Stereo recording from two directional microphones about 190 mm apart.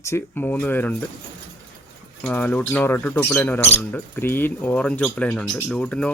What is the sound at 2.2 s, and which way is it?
Speech, 10° left (ahead or behind).